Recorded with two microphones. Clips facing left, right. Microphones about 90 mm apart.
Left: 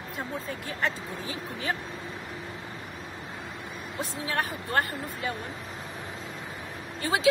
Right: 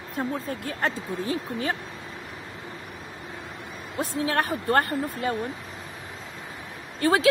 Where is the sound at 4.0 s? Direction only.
60° right (ahead or behind).